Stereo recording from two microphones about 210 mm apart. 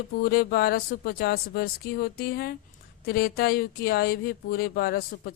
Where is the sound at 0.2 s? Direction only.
45° left (ahead or behind).